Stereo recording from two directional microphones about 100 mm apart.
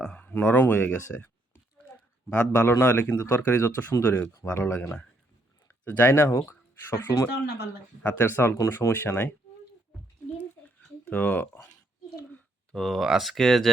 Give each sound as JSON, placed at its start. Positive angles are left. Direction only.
{"t": 0.0, "sound": "speech", "side_deg": 10}
{"t": 2.3, "sound": "speech", "side_deg": 15}
{"t": 8.0, "sound": "speech", "side_deg": 20}
{"t": 10.6, "sound": "a sound", "side_deg": 15}
{"t": 11.0, "sound": "speech", "side_deg": 15}
{"t": 12.3, "sound": "speech", "side_deg": 5}